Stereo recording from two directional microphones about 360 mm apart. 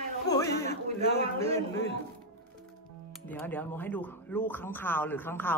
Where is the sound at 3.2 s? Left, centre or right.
Centre.